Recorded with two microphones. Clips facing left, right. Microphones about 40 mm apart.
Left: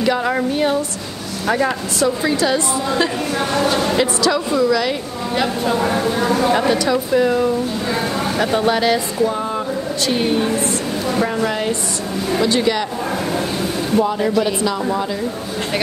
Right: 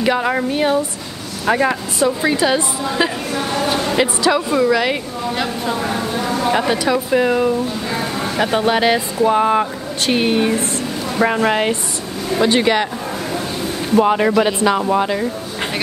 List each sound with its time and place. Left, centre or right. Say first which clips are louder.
0.0 s a woman's voice: right 1 dB; centre
5.4 s a woman's voice: left 5 dB; centre
6.7 s speech: even; centre
9.2 s speech: right 5 dB; right
13.9 s speech: right 4 dB; right
14.2 s speech: right 3 dB; right